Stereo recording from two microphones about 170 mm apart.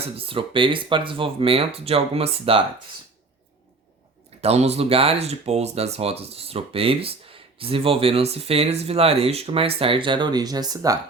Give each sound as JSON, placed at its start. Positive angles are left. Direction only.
{"t": 0.0, "sound": "speech", "side_deg": -35}
{"t": 4.4, "sound": "speech", "side_deg": -40}